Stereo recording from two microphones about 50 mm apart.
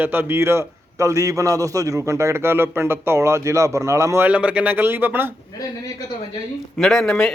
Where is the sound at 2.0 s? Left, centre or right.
Right.